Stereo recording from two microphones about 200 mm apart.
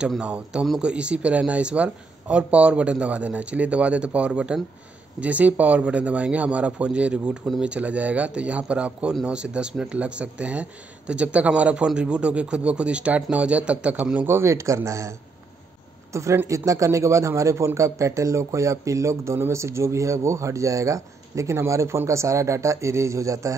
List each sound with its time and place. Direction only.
0.0 s speech: 5° right (ahead or behind)